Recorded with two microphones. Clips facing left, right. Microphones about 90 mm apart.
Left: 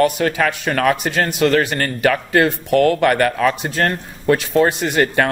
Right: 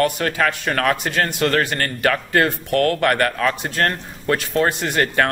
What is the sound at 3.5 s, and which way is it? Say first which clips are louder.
Speech: left 2 dB; 20° left (ahead or behind).